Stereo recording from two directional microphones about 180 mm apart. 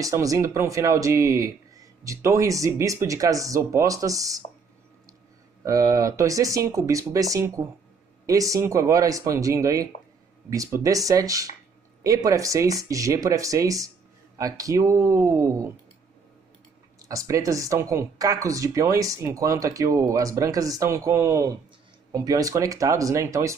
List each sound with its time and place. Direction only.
0.0 s speech: 20° right (ahead or behind)
5.6 s speech: 20° right (ahead or behind)
17.1 s speech: 20° right (ahead or behind)